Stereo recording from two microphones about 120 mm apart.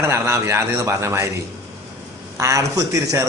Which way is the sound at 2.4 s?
25° right (ahead or behind).